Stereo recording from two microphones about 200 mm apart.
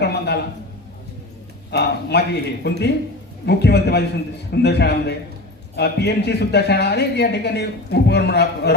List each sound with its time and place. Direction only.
0.0 s a man's voice: 55° left (ahead or behind)
1.7 s speech: 55° left (ahead or behind)